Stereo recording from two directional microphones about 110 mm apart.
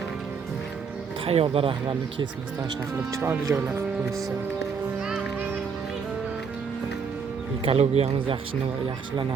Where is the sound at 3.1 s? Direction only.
25° right (ahead or behind).